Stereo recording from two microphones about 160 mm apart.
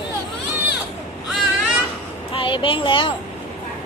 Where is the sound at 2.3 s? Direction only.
30° left (ahead or behind).